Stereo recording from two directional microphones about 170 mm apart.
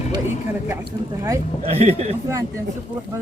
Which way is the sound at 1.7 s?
35° right (ahead or behind).